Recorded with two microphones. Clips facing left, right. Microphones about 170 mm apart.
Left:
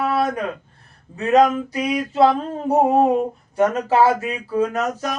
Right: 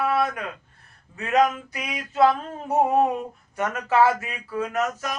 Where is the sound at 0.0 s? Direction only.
35° left (ahead or behind).